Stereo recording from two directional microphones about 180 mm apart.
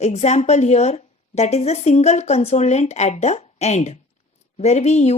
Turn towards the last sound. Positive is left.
turn(degrees=40)  # may be behind; listen again after turning